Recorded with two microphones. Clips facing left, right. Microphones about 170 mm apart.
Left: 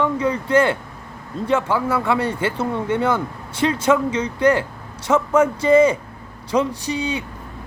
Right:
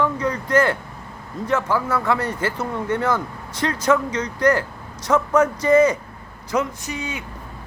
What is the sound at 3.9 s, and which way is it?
Speech, 10° left (ahead or behind).